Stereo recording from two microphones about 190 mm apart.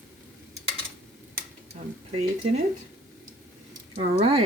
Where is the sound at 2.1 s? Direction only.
35° right (ahead or behind).